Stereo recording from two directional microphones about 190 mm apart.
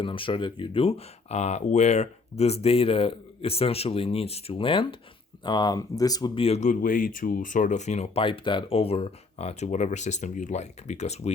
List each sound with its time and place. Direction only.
0.0 s speech: 25° left (ahead or behind)